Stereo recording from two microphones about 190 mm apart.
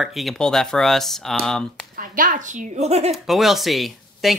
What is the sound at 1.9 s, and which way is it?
A woman's voice, 45° right (ahead or behind).